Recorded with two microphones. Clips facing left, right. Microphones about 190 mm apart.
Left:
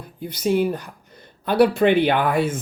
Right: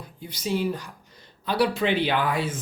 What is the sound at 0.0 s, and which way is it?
Speech, 55° left (ahead or behind).